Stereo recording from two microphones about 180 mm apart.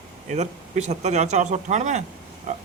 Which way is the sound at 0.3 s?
40° right (ahead or behind).